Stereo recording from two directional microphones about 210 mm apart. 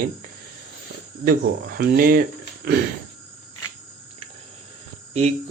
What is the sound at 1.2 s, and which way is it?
Speech, 45° right (ahead or behind).